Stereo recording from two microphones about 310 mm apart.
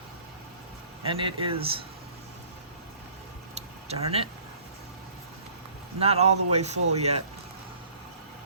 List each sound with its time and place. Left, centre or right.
1.0 s speech: centre
3.5 s a sound: centre
6.0 s speech: centre